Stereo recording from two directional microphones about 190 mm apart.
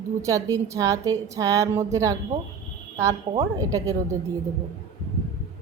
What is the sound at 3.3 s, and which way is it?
Speech, 20° right (ahead or behind).